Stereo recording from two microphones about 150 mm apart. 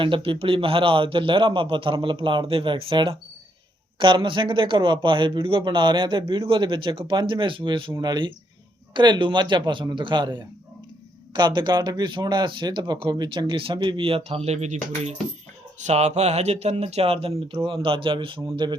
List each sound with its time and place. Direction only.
0.0 s speech: 35° right (ahead or behind)